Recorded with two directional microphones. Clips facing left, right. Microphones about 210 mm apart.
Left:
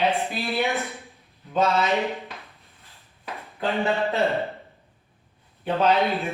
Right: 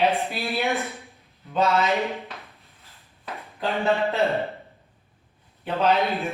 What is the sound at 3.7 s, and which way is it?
Speech, centre (ahead or behind).